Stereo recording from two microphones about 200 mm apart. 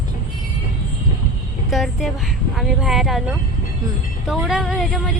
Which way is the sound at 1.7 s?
Centre (ahead or behind).